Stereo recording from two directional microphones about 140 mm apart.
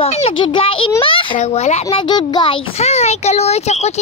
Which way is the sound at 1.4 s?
50° left (ahead or behind).